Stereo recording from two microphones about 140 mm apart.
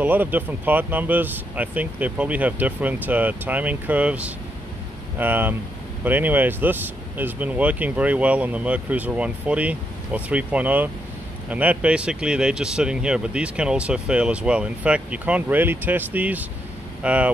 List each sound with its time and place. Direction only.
0.0 s speech: 15° right (ahead or behind)